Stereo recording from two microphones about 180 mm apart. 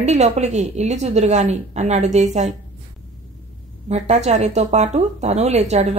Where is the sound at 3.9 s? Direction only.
40° right (ahead or behind).